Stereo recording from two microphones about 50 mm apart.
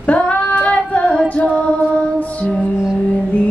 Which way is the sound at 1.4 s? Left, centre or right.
Centre.